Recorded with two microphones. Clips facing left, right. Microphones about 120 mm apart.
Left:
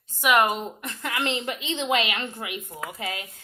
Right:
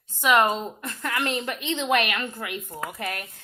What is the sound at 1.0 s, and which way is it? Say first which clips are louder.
A woman's voice: even; 20° left (ahead or behind).